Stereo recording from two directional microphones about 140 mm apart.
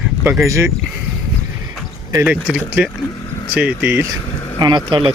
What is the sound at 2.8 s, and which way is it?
Speech, 10° right (ahead or behind).